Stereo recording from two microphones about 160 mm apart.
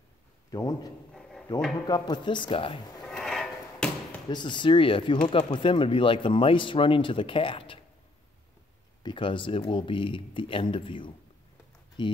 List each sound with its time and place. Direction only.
0.5 s speech: 25° left (ahead or behind)
3.1 s a sound: 5° left (ahead or behind)
4.3 s speech: 30° left (ahead or behind)
9.0 s speech: 30° left (ahead or behind)